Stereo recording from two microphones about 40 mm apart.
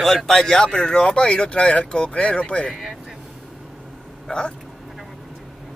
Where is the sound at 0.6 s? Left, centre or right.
Left.